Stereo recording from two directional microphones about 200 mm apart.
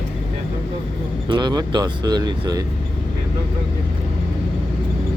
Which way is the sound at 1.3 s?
20° right (ahead or behind).